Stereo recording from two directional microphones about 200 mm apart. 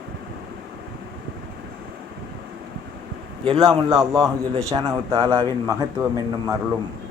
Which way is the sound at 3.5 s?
25° right (ahead or behind).